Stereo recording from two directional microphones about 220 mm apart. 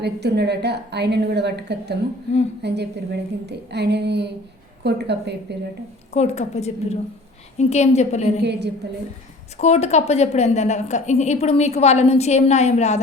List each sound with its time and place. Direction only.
0.0 s a woman's voice: 50° right (ahead or behind)
6.1 s a woman's voice: 30° left (ahead or behind)
8.4 s a woman's voice: 50° right (ahead or behind)
9.6 s a woman's voice: 30° left (ahead or behind)